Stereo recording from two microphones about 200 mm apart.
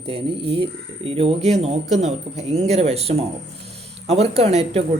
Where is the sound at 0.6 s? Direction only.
30° right (ahead or behind).